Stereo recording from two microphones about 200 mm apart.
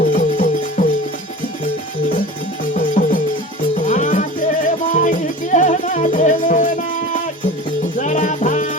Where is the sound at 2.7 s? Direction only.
40° left (ahead or behind).